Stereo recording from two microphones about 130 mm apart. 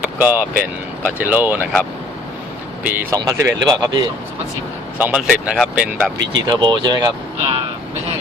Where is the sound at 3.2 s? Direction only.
25° right (ahead or behind).